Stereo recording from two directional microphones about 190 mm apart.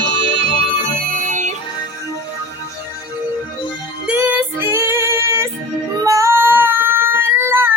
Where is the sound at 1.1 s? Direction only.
40° right (ahead or behind).